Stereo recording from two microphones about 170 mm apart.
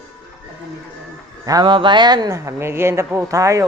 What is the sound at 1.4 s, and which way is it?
Speech, 25° right (ahead or behind).